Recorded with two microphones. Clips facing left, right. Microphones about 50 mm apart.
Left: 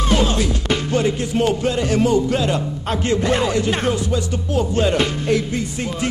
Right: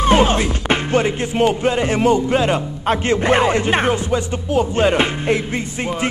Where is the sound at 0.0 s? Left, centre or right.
Right.